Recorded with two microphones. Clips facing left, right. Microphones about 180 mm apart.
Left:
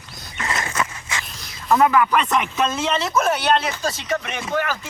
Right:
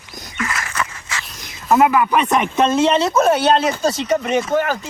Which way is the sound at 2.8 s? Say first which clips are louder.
Right 7 dB; 30° right (ahead or behind).